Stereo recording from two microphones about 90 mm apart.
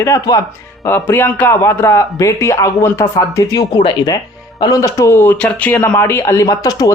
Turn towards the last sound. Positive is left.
turn(degrees=40)  # may be behind; listen again after turning